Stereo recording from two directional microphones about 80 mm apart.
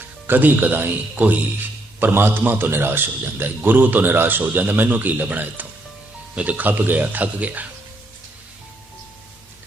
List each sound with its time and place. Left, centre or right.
0.0 s speech: right